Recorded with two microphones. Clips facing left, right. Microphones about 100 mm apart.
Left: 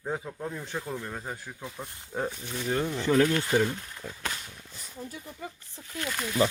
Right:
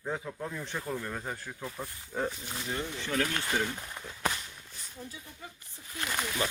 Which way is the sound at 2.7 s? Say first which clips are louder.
Left 7 dB; 45° left (ahead or behind).